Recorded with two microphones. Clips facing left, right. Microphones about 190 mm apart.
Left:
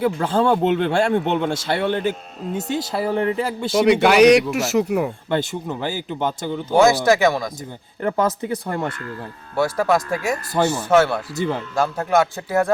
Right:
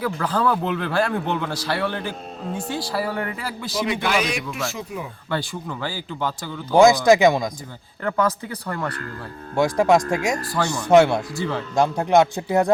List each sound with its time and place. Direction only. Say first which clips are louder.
0.0 s a man's voice: left 4 dB; 25° left (ahead or behind)
3.8 s speech: left 10 dB; 65° left (ahead or behind)
5.3 s a man's voice: left 5 dB; 20° left (ahead or behind)
6.7 s speech: right 2 dB; 15° right (ahead or behind)
8.0 s a man's voice: left 2 dB; 25° left (ahead or behind)
9.6 s speech: right 2 dB; 15° right (ahead or behind)
11.3 s a man's voice: left 3 dB; 20° left (ahead or behind)
11.8 s speech: right 2 dB; 15° right (ahead or behind)